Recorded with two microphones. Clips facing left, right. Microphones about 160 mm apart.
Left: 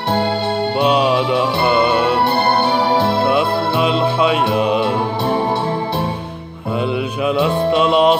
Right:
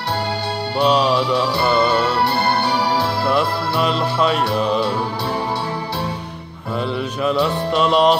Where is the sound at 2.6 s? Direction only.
25° left (ahead or behind).